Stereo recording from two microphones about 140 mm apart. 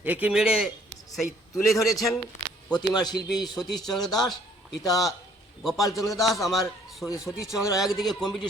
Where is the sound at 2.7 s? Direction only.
30° left (ahead or behind).